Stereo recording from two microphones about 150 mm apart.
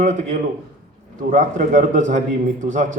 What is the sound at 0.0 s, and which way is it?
A man's voice, 55° right (ahead or behind).